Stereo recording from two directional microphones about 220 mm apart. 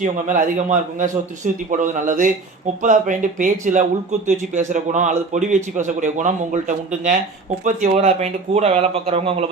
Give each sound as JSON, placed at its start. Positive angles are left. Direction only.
{"t": 0.3, "sound": "a man's voice", "side_deg": -35}